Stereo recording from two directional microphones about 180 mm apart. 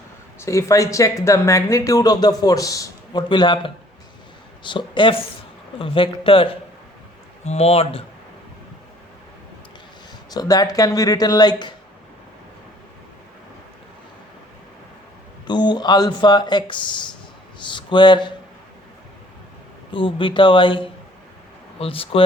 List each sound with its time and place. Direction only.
0.3 s speech: 15° left (ahead or behind); by 8.0 s 35° left (ahead or behind)
10.2 s speech: 20° left (ahead or behind)
15.4 s speech: 25° left (ahead or behind)
19.9 s speech: 30° left (ahead or behind)